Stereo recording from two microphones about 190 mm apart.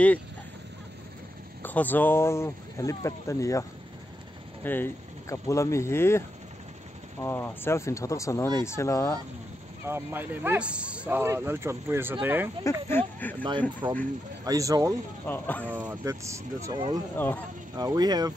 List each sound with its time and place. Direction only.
1.6 s speech: 10° left (ahead or behind)
4.6 s speech: 10° left (ahead or behind)
9.8 s speech: 10° right (ahead or behind)
12.8 s speech: 10° left (ahead or behind)
13.8 s speech: 15° right (ahead or behind)
15.2 s speech: 10° left (ahead or behind)
15.7 s speech: 10° right (ahead or behind)
16.7 s speech: 25° right (ahead or behind)